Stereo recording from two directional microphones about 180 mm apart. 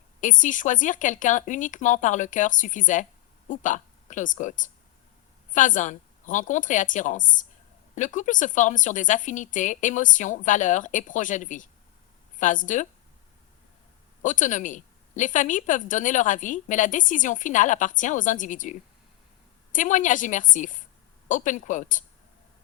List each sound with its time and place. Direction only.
0.2 s a woman's voice: 45° left (ahead or behind)
14.2 s a woman's voice: 45° left (ahead or behind)